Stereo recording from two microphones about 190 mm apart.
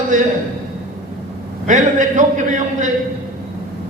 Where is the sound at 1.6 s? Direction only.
40° right (ahead or behind).